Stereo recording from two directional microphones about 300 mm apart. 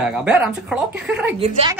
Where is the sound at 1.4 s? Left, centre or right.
Centre.